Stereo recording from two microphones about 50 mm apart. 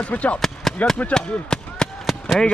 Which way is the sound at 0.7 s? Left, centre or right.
Centre.